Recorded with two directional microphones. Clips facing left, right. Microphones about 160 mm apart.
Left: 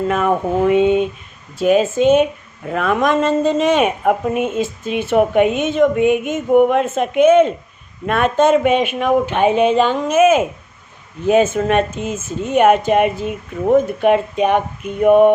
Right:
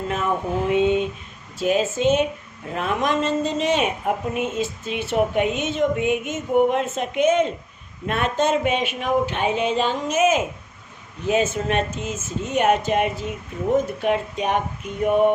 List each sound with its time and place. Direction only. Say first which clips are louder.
0.1 s speech: left 4 dB; 60° left (ahead or behind)